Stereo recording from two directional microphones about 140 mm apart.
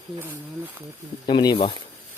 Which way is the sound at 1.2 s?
30° left (ahead or behind).